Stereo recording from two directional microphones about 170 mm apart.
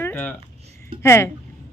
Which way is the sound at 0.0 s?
10° left (ahead or behind).